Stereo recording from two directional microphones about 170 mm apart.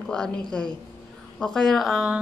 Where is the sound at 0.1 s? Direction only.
5° left (ahead or behind).